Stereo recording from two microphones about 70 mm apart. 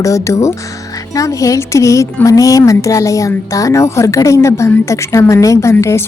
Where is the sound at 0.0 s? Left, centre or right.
Left.